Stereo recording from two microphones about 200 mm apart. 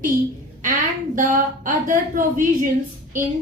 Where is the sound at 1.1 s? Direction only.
40° right (ahead or behind).